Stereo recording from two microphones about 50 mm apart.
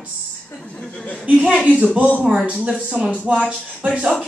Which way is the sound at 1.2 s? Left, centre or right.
Right.